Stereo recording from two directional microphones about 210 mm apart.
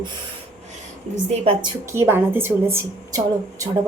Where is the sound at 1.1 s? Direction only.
25° right (ahead or behind).